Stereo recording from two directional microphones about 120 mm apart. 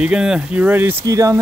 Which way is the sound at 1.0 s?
25° right (ahead or behind).